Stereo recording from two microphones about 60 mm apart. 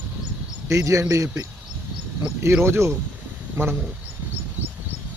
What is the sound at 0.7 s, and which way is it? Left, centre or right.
Speech, right.